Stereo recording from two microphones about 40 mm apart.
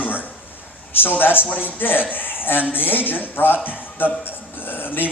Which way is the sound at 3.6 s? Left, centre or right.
Left.